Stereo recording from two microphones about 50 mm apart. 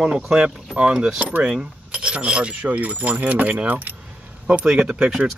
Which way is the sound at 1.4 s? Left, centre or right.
Centre.